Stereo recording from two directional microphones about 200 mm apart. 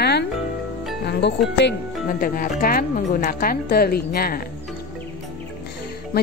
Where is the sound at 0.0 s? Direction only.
55° left (ahead or behind).